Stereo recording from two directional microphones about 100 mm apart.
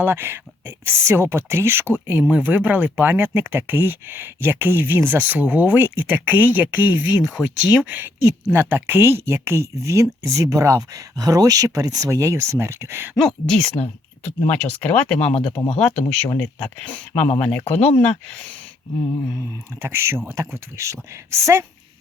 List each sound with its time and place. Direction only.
0.0 s speech: 25° right (ahead or behind)
13.1 s speech: 5° left (ahead or behind)
14.5 s speech: 20° left (ahead or behind)
15.6 s speech: 75° left (ahead or behind)
16.4 s speech: 15° left (ahead or behind)
19.8 s speech: 25° right (ahead or behind)